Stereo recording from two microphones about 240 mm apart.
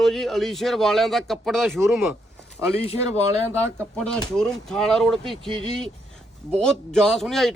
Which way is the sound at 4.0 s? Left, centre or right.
Centre.